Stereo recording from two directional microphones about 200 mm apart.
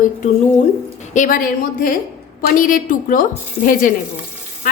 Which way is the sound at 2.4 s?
45° left (ahead or behind).